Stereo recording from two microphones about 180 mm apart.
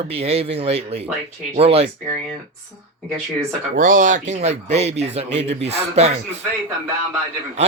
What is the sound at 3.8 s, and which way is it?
Speech, 45° right (ahead or behind).